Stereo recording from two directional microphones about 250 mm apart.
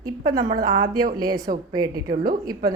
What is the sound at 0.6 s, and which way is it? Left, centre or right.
Speech, centre.